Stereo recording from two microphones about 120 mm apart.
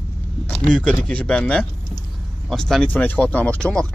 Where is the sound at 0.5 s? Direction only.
5° left (ahead or behind).